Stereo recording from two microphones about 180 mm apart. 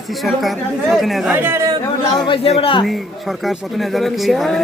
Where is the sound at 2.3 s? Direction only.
30° left (ahead or behind).